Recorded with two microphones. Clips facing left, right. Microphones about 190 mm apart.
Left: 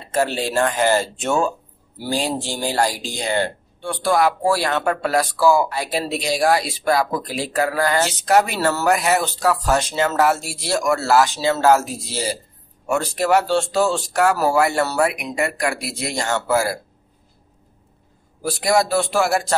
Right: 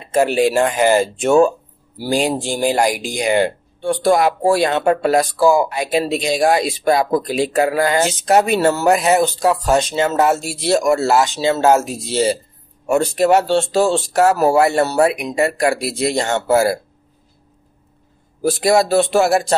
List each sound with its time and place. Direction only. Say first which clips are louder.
0.0 s speech: right 7 dB; 15° right (ahead or behind)
18.4 s speech: right 4 dB; 25° right (ahead or behind)